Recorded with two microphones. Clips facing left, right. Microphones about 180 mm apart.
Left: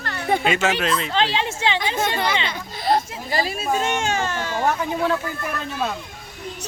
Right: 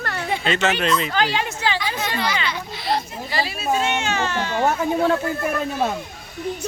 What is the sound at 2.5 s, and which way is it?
Baby cry, 45° left (ahead or behind).